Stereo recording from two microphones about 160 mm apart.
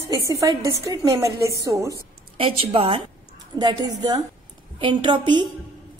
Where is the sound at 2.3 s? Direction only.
35° right (ahead or behind).